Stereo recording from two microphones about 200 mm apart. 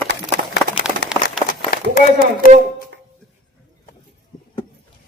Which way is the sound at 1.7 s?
45° left (ahead or behind).